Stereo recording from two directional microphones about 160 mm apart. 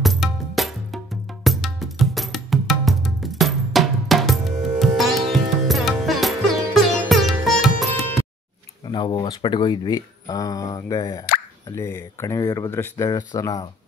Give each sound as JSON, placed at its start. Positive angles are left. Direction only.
{"t": 0.0, "sound": "music", "side_deg": 0}
{"t": 8.8, "sound": "speech", "side_deg": 30}